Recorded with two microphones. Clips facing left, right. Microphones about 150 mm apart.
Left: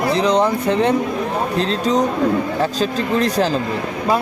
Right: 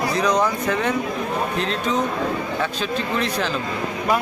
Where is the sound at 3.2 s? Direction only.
40° left (ahead or behind).